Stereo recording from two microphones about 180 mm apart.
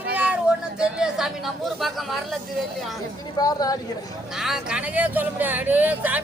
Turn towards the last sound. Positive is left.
turn(degrees=-10)  # may be behind; listen again after turning